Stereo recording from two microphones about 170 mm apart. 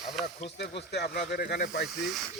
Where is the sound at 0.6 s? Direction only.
80° left.